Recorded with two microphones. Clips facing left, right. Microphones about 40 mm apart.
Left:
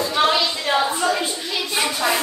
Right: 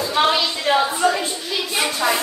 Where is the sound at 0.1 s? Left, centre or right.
Centre.